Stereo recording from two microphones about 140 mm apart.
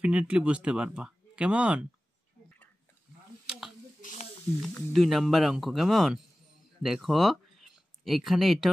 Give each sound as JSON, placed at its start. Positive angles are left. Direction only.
{"t": 0.0, "sound": "speech", "side_deg": -10}
{"t": 4.0, "sound": "a sound", "side_deg": 55}
{"t": 4.6, "sound": "speech", "side_deg": 0}